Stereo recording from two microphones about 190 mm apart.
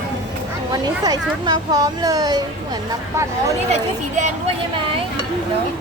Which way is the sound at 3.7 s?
40° right (ahead or behind).